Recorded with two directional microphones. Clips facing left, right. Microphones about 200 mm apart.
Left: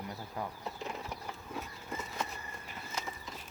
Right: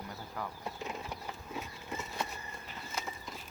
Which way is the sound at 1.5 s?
Centre (ahead or behind).